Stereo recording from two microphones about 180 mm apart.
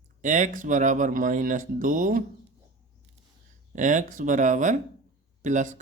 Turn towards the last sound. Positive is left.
turn(degrees=-45)  # may be behind; listen again after turning